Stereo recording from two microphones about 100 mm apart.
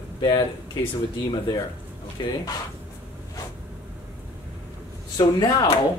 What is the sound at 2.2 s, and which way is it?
Speech, 50° left (ahead or behind).